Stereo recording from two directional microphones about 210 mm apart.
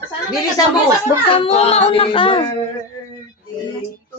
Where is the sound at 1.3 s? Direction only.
25° left (ahead or behind).